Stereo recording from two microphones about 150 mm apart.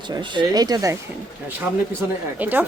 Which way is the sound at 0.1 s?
30° right (ahead or behind).